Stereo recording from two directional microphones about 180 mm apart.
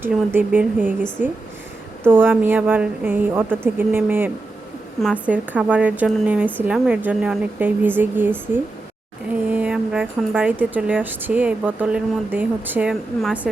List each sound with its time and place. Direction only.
0.0 s a woman's voice: 10° right (ahead or behind)
2.0 s a woman's voice: 10° right (ahead or behind)